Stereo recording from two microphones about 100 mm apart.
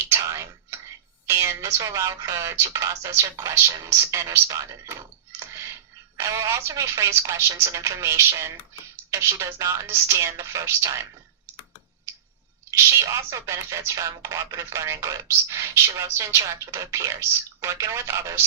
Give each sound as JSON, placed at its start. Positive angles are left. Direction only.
{"t": 0.1, "sound": "whispering", "side_deg": -30}
{"t": 1.3, "sound": "speech", "side_deg": -30}
{"t": 12.7, "sound": "speech", "side_deg": -30}